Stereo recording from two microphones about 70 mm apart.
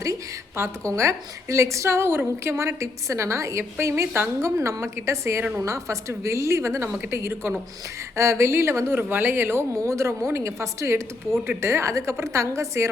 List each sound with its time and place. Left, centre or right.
0.0 s a woman's voice: right